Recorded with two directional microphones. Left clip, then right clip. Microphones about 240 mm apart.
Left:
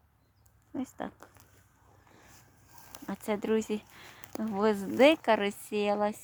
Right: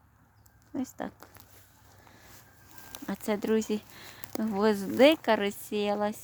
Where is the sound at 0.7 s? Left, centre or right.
Centre.